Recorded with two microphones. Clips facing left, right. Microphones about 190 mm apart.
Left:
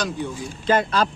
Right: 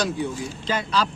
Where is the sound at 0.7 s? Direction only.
50° left (ahead or behind).